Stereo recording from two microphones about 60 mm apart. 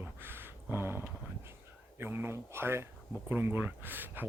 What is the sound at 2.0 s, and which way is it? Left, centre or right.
Speech, right.